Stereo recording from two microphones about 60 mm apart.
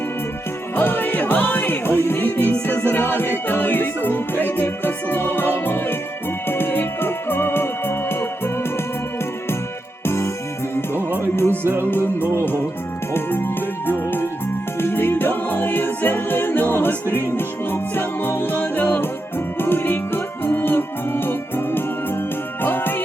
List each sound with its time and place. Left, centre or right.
0.8 s music: left
10.1 s music: left
11.6 s music: right
11.9 s music: left